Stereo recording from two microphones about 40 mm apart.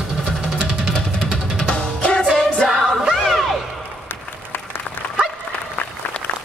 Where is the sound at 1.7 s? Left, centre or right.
Left.